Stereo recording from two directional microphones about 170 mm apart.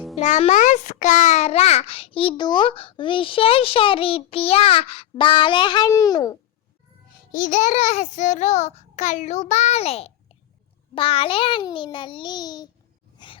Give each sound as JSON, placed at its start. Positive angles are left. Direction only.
{"t": 0.2, "sound": "a child's voice", "side_deg": 40}
{"t": 7.3, "sound": "a child's voice", "side_deg": 50}
{"t": 13.1, "sound": "a sound", "side_deg": 30}